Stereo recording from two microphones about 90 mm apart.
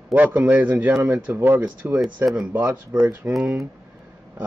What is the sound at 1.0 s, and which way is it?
Speech, 35° right (ahead or behind).